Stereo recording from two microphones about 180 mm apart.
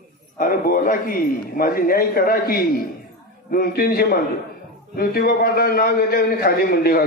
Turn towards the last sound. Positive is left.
turn(degrees=55)  # may be behind; listen again after turning